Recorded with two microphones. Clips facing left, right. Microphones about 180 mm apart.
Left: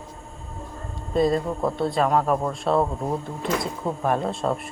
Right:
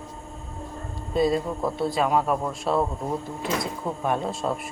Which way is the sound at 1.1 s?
Centre (ahead or behind).